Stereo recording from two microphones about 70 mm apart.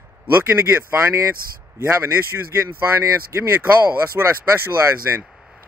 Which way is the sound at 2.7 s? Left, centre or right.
Right.